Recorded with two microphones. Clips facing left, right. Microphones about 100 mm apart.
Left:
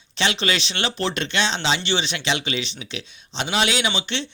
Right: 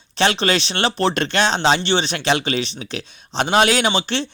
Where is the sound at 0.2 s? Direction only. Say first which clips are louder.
Right 5 dB; 40° right (ahead or behind).